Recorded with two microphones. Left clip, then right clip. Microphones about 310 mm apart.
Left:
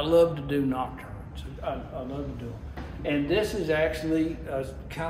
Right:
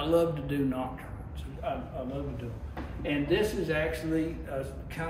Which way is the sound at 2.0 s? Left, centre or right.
Centre.